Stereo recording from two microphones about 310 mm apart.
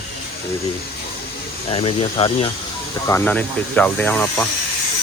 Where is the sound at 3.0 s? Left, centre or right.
Centre.